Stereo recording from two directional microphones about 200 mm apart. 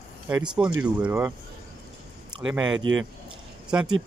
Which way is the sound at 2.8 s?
80° right.